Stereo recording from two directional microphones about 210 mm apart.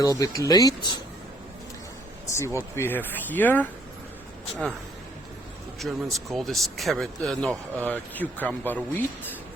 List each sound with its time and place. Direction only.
0.0 s speech: 15° left (ahead or behind)
2.2 s speech: 15° left (ahead or behind)
5.8 s speech: centre (ahead or behind)